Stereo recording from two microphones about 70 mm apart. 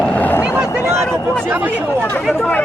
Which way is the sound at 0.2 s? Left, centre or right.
Left.